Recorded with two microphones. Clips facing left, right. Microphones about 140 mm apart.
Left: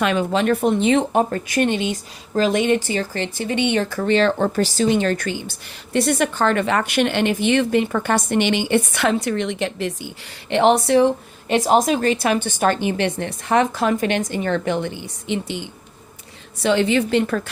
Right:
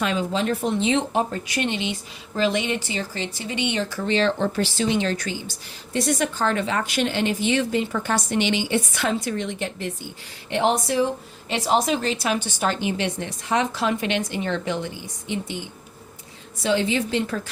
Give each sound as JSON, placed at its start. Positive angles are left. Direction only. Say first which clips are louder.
{"t": 0.0, "sound": "speech", "louder": "left 5 dB", "side_deg": 65}
{"t": 10.5, "sound": "a woman's voice", "louder": "left 6 dB", "side_deg": 70}
{"t": 16.6, "sound": "speech", "louder": "left 4 dB", "side_deg": 65}